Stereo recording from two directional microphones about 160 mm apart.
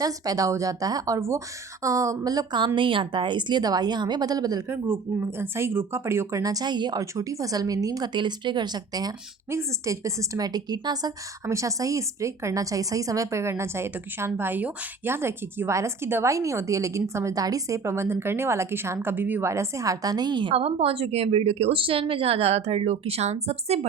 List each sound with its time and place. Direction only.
0.0 s a woman's voice: 20° right (ahead or behind)
4.9 s a woman's voice: 15° right (ahead or behind); by 23.8 s 40° right (ahead or behind)